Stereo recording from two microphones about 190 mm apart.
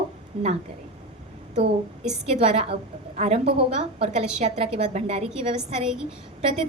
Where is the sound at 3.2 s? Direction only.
35° right (ahead or behind).